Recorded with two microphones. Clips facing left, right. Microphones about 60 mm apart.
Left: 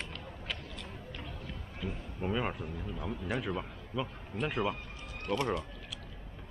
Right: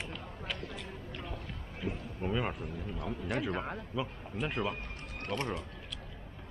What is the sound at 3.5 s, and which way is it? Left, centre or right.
Speech, right.